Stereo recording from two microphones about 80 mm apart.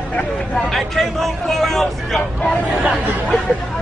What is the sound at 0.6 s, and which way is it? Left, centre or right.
Speech, centre.